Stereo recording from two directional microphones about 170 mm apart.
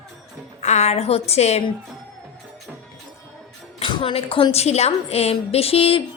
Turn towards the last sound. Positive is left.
turn(degrees=35)  # may be behind; listen again after turning